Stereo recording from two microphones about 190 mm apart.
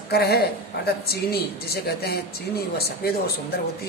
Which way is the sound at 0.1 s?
55° left (ahead or behind).